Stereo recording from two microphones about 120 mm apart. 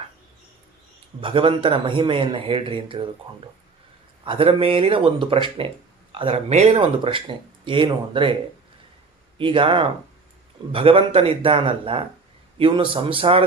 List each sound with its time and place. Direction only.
1.2 s speech: 45° right (ahead or behind)
4.3 s speech: 50° right (ahead or behind)
7.0 s speech: 45° right (ahead or behind)
9.4 s speech: 45° right (ahead or behind)